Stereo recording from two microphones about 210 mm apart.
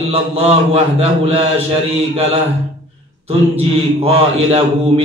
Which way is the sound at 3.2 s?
30° right (ahead or behind).